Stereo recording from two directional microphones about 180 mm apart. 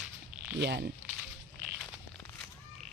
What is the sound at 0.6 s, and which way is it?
Speech, 70° right (ahead or behind).